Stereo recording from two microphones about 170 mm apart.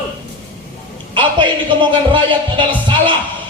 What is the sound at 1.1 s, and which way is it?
Speech, 30° right (ahead or behind).